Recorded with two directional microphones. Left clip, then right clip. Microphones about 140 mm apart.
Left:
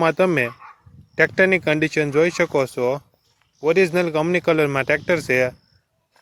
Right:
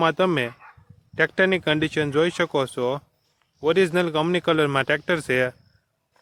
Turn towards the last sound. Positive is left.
turn(degrees=0)  # may be behind; listen again after turning